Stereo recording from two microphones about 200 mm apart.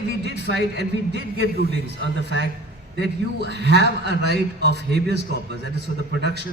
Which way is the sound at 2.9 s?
55° right (ahead or behind).